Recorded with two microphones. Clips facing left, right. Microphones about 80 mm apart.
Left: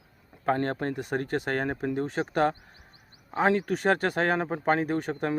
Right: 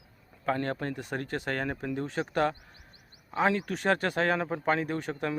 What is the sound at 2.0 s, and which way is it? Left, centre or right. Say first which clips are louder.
Speech: left 2 dB; left.